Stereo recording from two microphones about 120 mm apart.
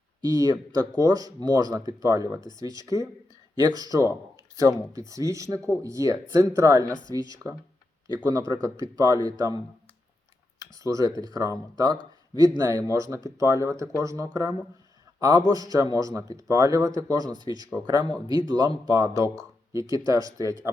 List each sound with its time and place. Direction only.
0.2 s speech: 35° right (ahead or behind)
4.1 s a sound: 25° right (ahead or behind)
4.9 s speech: 25° right (ahead or behind)
8.0 s speech: 30° right (ahead or behind)
10.6 s speech: 30° right (ahead or behind)